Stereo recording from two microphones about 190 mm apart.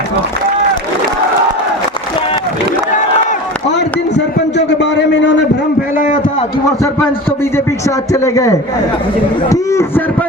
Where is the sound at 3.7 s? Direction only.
65° left (ahead or behind).